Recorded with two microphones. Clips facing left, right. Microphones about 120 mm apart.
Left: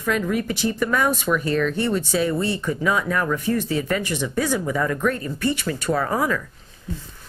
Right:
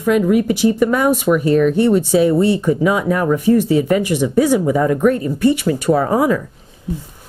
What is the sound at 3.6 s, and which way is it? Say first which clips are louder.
Speech: right 9 dB; 15° right (ahead or behind).